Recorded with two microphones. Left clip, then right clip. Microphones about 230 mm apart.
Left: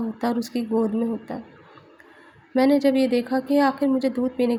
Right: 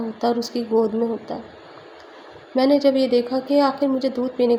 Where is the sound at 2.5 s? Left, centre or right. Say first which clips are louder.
Right 2 dB; left.